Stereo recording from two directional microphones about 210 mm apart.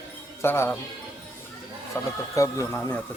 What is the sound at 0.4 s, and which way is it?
Speech, 10° left (ahead or behind).